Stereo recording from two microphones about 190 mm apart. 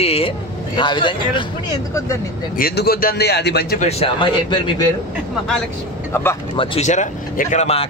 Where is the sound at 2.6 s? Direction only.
50° left (ahead or behind).